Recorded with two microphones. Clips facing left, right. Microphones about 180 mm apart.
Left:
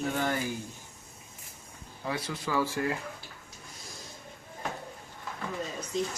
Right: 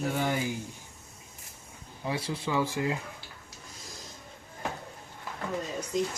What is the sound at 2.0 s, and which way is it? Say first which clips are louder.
Speech: right 2 dB; 30° right (ahead or behind).